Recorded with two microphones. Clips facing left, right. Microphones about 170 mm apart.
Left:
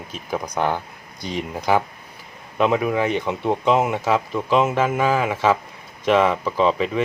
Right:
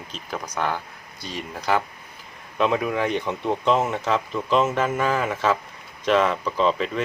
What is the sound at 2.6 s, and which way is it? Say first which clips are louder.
Speech: left 3 dB; 5° left (ahead or behind).